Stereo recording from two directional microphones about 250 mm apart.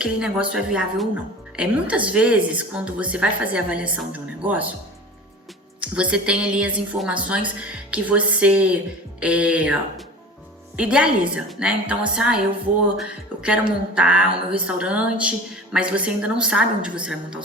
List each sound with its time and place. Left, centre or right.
0.0 s a woman's voice: centre
5.8 s a woman's voice: centre
10.8 s a woman's voice: centre